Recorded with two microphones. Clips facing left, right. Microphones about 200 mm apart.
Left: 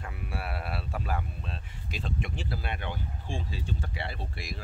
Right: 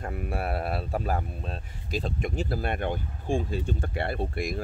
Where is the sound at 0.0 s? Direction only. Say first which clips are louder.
Right 7 dB; 50° right (ahead or behind).